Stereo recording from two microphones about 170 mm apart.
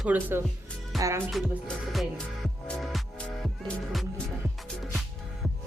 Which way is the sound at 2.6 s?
5° left (ahead or behind).